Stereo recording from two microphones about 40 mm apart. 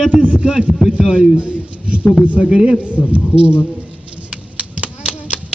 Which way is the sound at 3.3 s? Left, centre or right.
Right.